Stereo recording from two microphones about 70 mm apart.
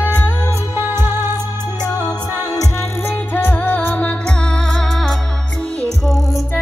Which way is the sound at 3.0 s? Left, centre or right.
Left.